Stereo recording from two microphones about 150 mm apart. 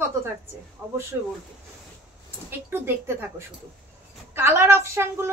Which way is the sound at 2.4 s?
15° right (ahead or behind).